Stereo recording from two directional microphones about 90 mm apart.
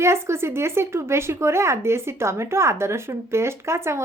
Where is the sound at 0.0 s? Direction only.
30° right (ahead or behind).